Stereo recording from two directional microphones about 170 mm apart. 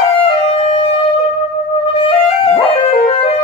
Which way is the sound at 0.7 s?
35° left (ahead or behind).